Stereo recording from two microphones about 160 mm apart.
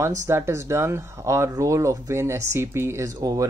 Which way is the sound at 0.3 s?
15° right (ahead or behind).